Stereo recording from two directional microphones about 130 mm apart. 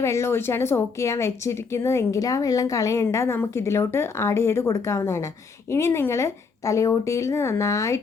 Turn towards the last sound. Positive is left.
turn(degrees=25)  # may be behind; listen again after turning